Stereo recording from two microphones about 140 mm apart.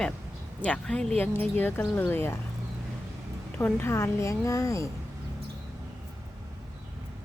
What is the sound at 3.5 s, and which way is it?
A woman's voice, 15° left (ahead or behind).